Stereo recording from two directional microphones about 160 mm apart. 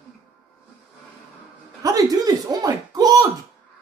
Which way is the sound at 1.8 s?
25° right (ahead or behind).